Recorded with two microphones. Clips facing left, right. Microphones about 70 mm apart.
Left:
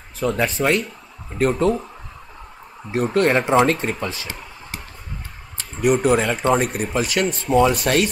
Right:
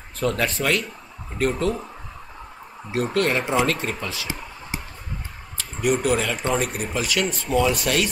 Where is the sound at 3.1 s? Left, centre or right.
Left.